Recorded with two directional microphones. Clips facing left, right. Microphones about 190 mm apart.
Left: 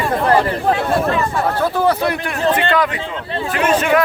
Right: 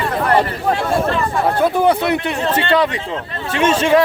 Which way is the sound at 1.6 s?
20° right (ahead or behind).